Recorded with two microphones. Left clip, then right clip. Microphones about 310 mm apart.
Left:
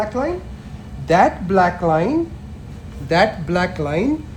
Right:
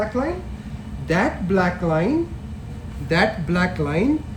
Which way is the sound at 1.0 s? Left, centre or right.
Left.